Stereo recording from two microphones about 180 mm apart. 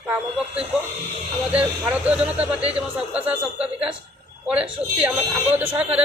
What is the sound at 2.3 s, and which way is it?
Speech, 35° right (ahead or behind).